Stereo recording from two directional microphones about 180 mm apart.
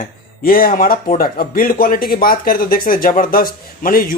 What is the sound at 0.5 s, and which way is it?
Speech, 55° left (ahead or behind).